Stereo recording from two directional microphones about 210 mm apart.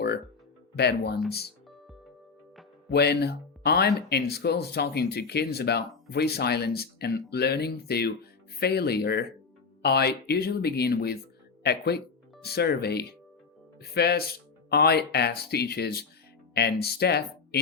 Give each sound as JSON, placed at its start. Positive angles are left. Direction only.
{"t": 0.8, "sound": "speech", "side_deg": 50}
{"t": 2.9, "sound": "speech", "side_deg": 50}